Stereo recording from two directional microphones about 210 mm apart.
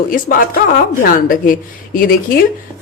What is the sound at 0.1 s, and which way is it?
A woman's voice, 40° left (ahead or behind).